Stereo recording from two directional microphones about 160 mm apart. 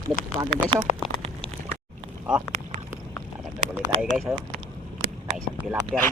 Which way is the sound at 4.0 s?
5° right (ahead or behind).